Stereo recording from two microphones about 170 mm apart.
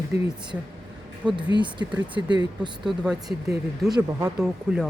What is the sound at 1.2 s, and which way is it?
Speech, 25° right (ahead or behind).